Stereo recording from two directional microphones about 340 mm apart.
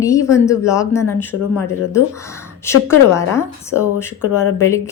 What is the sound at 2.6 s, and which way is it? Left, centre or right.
Speech, centre.